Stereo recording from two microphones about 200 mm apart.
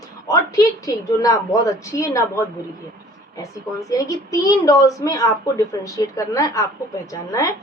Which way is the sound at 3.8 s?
15° left (ahead or behind).